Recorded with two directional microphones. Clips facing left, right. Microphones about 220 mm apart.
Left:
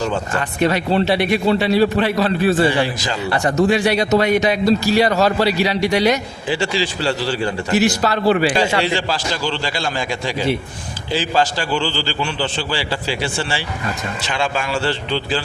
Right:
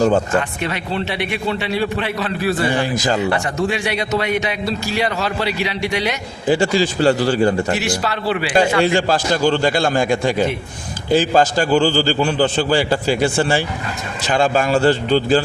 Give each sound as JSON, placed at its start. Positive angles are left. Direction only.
{"t": 0.6, "sound": "a man's voice", "side_deg": 40}
{"t": 2.4, "sound": "a man's voice", "side_deg": 30}
{"t": 2.8, "sound": "a man's voice", "side_deg": -45}
{"t": 3.3, "sound": "a man's voice", "side_deg": 40}
{"t": 6.5, "sound": "a man's voice", "side_deg": -45}
{"t": 7.8, "sound": "a man's voice", "side_deg": 40}
{"t": 8.5, "sound": "a man's voice", "side_deg": -50}